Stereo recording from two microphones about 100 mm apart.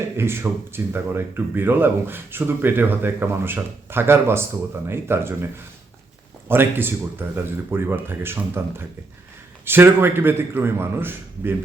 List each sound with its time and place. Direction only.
0.2 s speech: 25° right (ahead or behind)
6.5 s speech: 20° right (ahead or behind)